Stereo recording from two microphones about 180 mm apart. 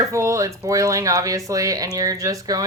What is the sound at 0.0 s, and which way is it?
A woman's voice, 15° right (ahead or behind).